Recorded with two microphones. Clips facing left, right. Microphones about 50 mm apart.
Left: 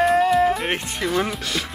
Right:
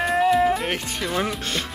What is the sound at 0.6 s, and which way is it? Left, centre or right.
Speech, left.